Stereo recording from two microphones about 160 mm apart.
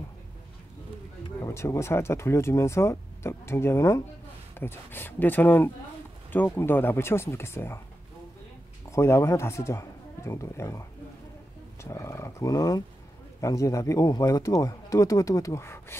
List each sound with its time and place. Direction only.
1.4 s speech: 15° left (ahead or behind)
8.9 s speech: 15° left (ahead or behind)